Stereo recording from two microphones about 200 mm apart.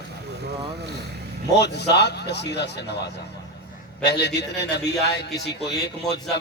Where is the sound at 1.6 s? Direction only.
55° left (ahead or behind).